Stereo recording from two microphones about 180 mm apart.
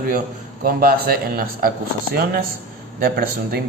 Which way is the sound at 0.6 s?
55° right (ahead or behind).